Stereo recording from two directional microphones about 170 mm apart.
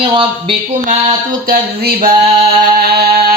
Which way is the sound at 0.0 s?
30° right (ahead or behind).